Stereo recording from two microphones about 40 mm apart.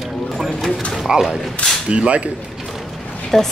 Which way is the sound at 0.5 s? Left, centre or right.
Centre.